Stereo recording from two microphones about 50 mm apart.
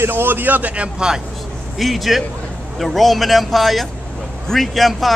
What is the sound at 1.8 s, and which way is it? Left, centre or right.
Speech, centre.